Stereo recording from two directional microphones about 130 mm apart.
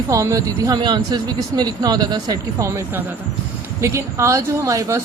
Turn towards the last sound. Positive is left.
turn(degrees=-25)  # may be behind; listen again after turning